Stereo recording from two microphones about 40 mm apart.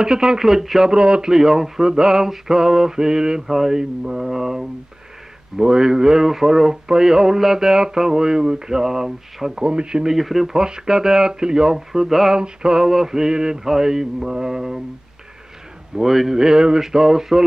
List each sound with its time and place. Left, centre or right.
0.0 s speech: centre
0.9 s speech: right
9.7 s speech: right
10.0 s speech: centre
16.0 s speech: centre